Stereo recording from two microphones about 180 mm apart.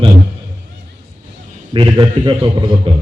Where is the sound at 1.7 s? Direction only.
25° right (ahead or behind).